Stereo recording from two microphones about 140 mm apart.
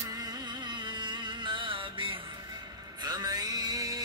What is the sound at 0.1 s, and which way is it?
Music, 30° right (ahead or behind).